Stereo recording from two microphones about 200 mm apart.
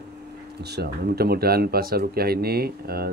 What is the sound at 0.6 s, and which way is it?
Speech, 55° right (ahead or behind).